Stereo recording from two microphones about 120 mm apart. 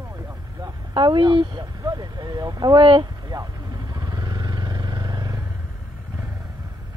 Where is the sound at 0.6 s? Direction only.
40° right (ahead or behind).